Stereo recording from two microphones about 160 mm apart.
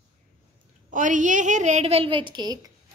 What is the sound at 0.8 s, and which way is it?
A woman's voice, 50° right (ahead or behind).